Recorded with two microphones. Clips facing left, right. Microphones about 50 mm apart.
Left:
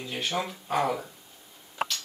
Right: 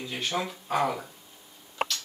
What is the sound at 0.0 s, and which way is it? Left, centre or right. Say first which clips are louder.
Speech: even; centre.